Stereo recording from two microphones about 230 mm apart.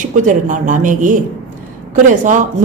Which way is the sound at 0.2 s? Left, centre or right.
Right.